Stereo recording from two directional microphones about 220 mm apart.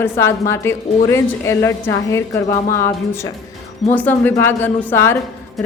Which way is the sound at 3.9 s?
10° left (ahead or behind).